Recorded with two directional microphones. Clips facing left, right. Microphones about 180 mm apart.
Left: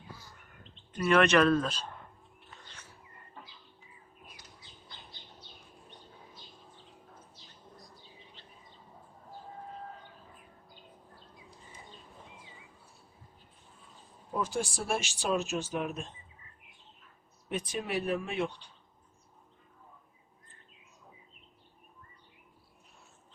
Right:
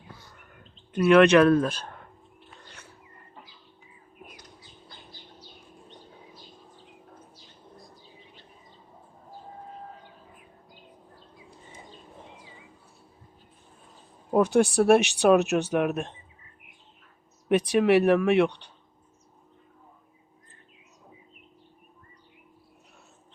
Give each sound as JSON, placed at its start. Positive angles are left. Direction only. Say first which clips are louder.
{"t": 0.9, "sound": "speech", "louder": "right 7 dB", "side_deg": -60}
{"t": 14.3, "sound": "speech", "louder": "right 13 dB", "side_deg": -65}
{"t": 17.5, "sound": "speech", "louder": "right 14 dB", "side_deg": -75}